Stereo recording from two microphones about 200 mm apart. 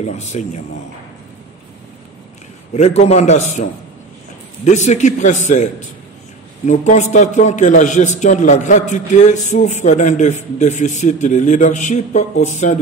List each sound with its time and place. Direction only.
0.0 s a man's voice: 35° left (ahead or behind)
2.7 s a man's voice: 30° left (ahead or behind)
4.6 s a man's voice: 35° left (ahead or behind)